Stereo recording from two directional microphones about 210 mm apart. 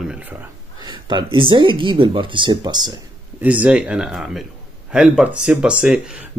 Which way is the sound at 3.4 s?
5° right (ahead or behind).